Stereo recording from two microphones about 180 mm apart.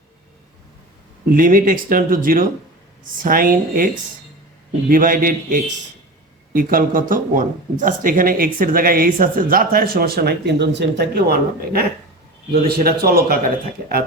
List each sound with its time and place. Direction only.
1.3 s speech: 50° right (ahead or behind)
4.9 s speech: 50° right (ahead or behind)